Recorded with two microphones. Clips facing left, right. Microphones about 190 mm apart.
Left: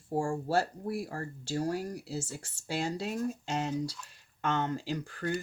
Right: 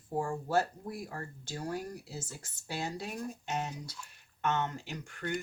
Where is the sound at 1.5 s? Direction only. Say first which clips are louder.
Left 6 dB; 30° left (ahead or behind).